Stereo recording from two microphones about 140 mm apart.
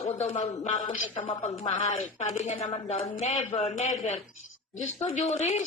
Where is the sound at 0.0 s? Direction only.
55° left (ahead or behind).